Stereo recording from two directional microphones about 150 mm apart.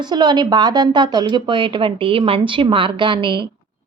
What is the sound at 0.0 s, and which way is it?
A child's voice, 30° right (ahead or behind).